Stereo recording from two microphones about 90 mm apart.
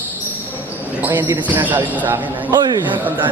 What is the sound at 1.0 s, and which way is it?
Speech, 20° right (ahead or behind).